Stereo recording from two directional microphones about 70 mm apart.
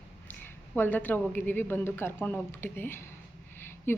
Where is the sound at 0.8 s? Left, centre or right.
Left.